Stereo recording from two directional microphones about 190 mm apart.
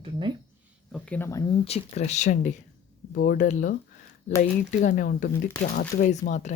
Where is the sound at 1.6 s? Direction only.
35° left (ahead or behind).